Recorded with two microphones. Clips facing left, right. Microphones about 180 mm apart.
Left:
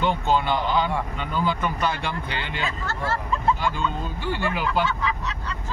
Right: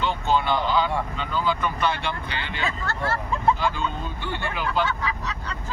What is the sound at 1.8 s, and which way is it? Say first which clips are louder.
Speech: even; 45° left (ahead or behind).